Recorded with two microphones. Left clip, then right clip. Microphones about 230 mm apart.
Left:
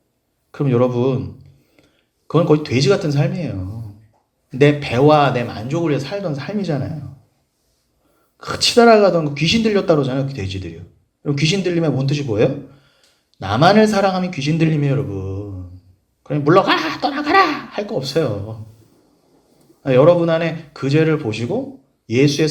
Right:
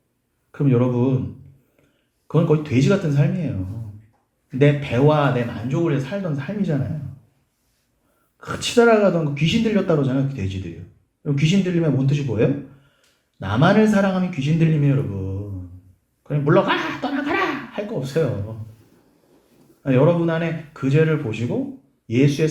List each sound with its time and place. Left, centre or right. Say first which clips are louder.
0.5 s speech: left 4 dB; left
2.2 s speech: left 5 dB; left
4.5 s speech: left 4 dB; left
8.4 s speech: left 4 dB; left
16.2 s a sound: left 4 dB; left
19.8 s a man's voice: left 6 dB; left